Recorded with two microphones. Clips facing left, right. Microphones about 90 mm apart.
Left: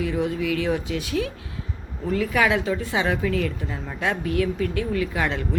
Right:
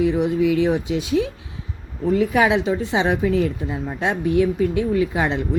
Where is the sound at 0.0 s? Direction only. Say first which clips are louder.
Right 6 dB; 20° right (ahead or behind).